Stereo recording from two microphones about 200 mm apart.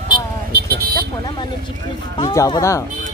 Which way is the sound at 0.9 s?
25° left (ahead or behind).